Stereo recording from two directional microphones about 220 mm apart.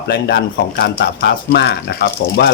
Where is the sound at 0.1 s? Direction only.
45° left (ahead or behind).